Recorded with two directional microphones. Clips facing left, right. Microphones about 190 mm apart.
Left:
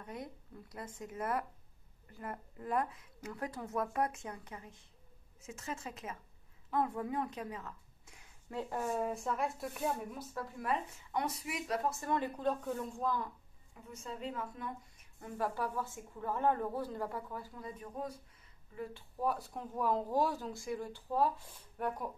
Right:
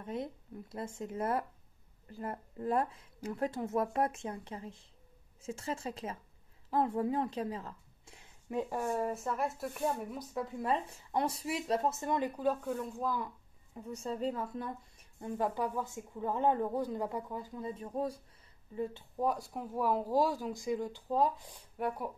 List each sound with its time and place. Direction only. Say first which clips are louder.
0.0 s speech: right 6 dB; 25° right (ahead or behind)
8.5 s speech: right 4 dB; 15° right (ahead or behind)
8.8 s speech: right 2 dB; centre (ahead or behind)
10.1 s speech: right 5 dB; 25° right (ahead or behind)
12.4 s speech: right 2 dB; 5° right (ahead or behind)
13.7 s speech: right 8 dB; 35° right (ahead or behind)
15.1 s speech: right 3 dB; 25° right (ahead or behind)
18.8 s speech: right 5 dB; 20° right (ahead or behind)